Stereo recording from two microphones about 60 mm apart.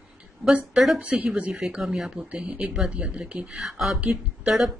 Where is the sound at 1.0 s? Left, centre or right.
Right.